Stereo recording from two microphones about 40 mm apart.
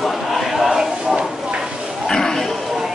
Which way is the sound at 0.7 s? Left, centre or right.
Right.